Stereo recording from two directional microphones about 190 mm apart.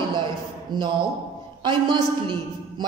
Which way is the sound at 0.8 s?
25° right (ahead or behind).